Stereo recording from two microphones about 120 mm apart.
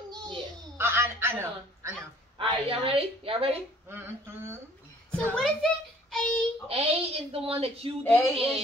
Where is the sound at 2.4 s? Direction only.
50° right (ahead or behind).